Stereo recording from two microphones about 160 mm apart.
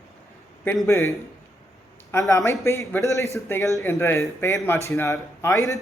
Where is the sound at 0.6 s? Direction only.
15° left (ahead or behind).